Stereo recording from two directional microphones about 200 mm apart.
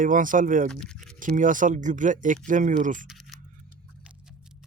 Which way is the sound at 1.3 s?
40° right (ahead or behind).